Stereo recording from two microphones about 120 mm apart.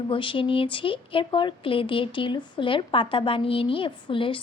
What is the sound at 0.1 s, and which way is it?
A woman's voice, 45° left (ahead or behind).